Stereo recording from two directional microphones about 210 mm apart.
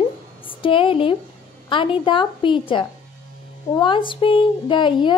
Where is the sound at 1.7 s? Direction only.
25° left (ahead or behind).